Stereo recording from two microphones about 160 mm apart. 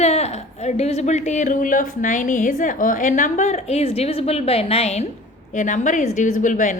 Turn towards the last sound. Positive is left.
turn(degrees=55)  # may be behind; listen again after turning